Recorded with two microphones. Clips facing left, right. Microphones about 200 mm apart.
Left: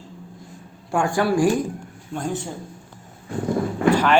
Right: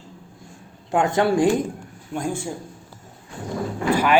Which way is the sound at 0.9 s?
20° right (ahead or behind).